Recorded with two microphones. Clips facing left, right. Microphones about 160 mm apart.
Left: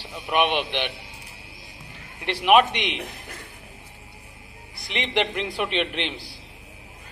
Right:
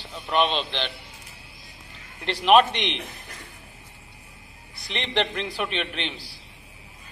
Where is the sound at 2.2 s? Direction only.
10° left (ahead or behind).